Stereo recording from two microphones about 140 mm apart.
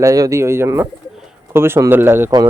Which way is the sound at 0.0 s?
25° right (ahead or behind).